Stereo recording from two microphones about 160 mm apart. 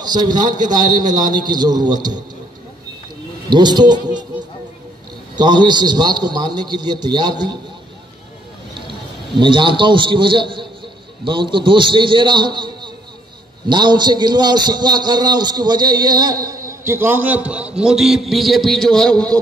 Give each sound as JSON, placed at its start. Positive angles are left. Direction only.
{"t": 0.0, "sound": "a man's voice", "side_deg": -25}
{"t": 3.4, "sound": "a man's voice", "side_deg": -25}
{"t": 5.4, "sound": "a man's voice", "side_deg": -25}
{"t": 9.4, "sound": "a man's voice", "side_deg": -30}